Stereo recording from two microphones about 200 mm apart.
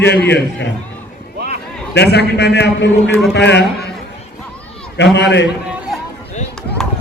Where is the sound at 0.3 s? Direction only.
60° left (ahead or behind).